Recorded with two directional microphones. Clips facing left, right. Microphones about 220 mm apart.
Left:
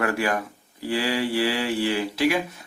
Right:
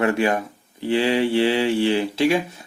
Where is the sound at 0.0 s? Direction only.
25° right (ahead or behind).